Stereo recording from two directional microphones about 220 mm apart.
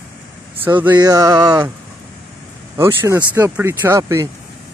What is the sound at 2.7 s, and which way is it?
Speech, 10° right (ahead or behind).